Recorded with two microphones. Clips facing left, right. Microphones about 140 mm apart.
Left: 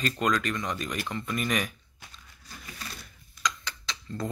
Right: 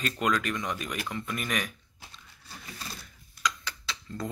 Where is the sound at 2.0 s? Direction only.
30° right (ahead or behind).